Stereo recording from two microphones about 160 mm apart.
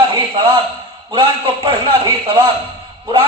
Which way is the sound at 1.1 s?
35° right (ahead or behind).